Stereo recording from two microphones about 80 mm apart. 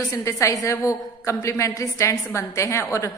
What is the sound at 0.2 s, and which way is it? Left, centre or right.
A woman's voice, left.